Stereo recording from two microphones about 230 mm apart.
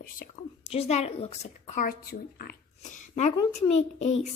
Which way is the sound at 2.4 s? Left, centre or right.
Left.